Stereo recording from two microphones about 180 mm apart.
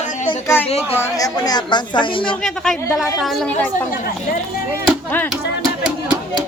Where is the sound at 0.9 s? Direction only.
15° left (ahead or behind).